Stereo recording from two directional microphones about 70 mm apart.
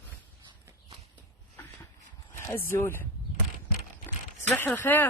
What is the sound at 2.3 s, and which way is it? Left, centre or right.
Speech, left.